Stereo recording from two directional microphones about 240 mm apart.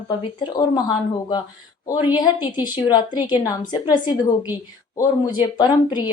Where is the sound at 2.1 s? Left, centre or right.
Centre.